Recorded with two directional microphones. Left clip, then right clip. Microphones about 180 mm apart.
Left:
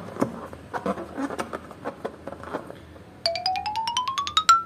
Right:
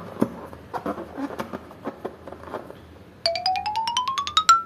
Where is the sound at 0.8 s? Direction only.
20° left (ahead or behind).